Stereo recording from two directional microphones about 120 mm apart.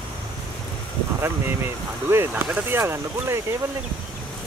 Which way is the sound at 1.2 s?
20° right (ahead or behind).